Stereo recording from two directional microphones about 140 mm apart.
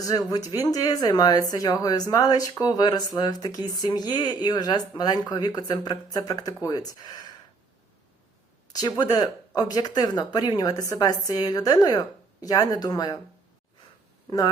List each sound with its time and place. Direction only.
0.0 s speech: 25° left (ahead or behind)
9.0 s speech: 30° left (ahead or behind)
14.3 s speech: 25° left (ahead or behind)